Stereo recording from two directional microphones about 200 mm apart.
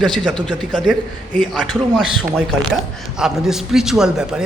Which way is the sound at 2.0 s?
5° right (ahead or behind).